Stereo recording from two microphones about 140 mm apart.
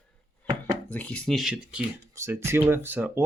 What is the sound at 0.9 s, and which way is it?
Speech, 10° left (ahead or behind).